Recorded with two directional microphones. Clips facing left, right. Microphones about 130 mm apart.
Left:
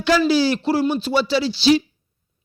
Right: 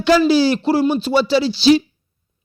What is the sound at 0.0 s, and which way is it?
Speech, 20° right (ahead or behind).